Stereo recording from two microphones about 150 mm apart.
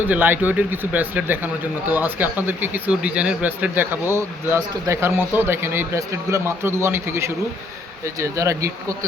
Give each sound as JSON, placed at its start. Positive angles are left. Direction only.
{"t": 0.0, "sound": "speech", "side_deg": -10}